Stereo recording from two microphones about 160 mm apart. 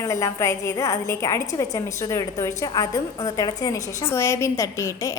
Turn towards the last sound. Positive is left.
turn(degrees=20)  # may be behind; listen again after turning